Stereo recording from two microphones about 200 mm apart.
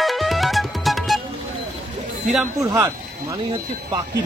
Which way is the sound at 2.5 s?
15° right (ahead or behind).